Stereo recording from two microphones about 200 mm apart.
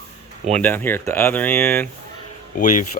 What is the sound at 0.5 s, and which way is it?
Speech, 10° left (ahead or behind).